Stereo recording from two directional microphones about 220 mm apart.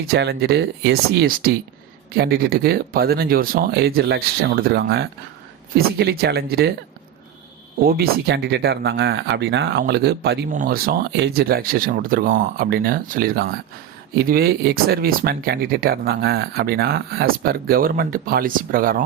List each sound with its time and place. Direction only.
0.1 s speech: 50° right (ahead or behind)
7.9 s speech: 45° right (ahead or behind)